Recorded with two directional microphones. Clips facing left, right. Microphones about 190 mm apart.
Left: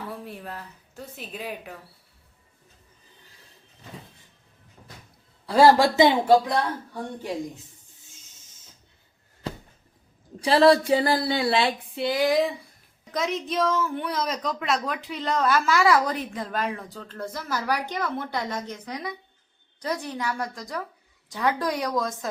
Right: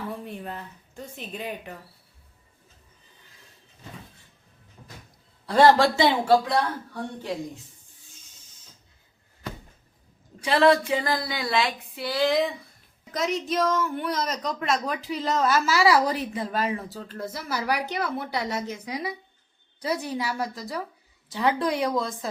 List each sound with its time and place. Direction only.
0.1 s a woman's voice: centre (ahead or behind)
5.5 s speech: 5° left (ahead or behind)
10.4 s speech: 35° left (ahead or behind); by 12.4 s 15° left (ahead or behind)
13.1 s a woman's voice: centre (ahead or behind)